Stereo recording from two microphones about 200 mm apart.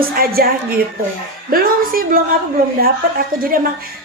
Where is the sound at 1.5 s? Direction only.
45° right (ahead or behind).